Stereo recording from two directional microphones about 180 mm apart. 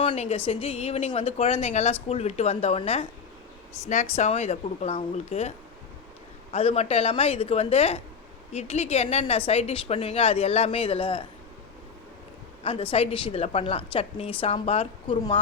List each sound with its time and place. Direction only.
0.0 s speech: 30° left (ahead or behind)
12.6 s speech: 30° left (ahead or behind)